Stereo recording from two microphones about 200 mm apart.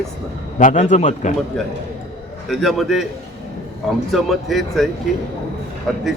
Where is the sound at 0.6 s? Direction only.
40° left (ahead or behind).